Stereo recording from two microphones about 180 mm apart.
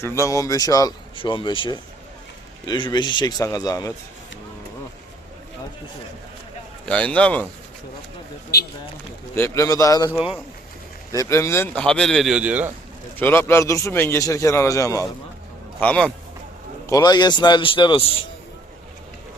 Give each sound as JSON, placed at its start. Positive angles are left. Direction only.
{"t": 0.0, "sound": "speech", "side_deg": 15}
{"t": 6.8, "sound": "a man's voice", "side_deg": 5}
{"t": 9.3, "sound": "a man's voice", "side_deg": 15}
{"t": 10.2, "sound": "speech", "side_deg": -5}
{"t": 11.1, "sound": "speech", "side_deg": 15}
{"t": 13.1, "sound": "a man's voice", "side_deg": 10}
{"t": 15.8, "sound": "speech", "side_deg": 5}
{"t": 16.9, "sound": "speech", "side_deg": 20}